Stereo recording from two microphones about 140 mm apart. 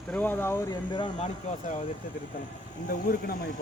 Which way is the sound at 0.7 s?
35° left (ahead or behind).